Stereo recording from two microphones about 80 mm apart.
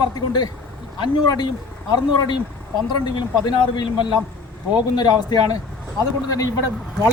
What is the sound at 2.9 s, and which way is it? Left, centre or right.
Speech, left.